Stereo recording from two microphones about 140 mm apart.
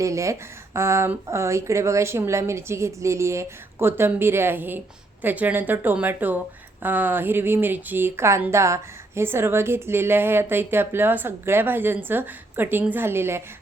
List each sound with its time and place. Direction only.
0.0 s a woman's voice: 20° right (ahead or behind)